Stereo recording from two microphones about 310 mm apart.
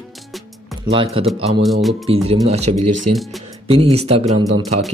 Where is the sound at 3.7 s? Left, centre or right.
Centre.